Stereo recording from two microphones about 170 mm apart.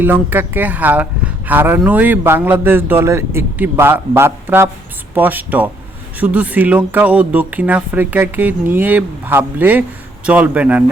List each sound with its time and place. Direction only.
0.0 s speech: 10° right (ahead or behind)